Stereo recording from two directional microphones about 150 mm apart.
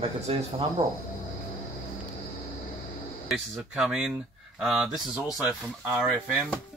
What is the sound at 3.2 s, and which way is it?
Speech, 5° right (ahead or behind).